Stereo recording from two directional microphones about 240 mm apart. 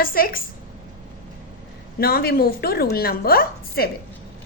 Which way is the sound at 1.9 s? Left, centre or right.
Left.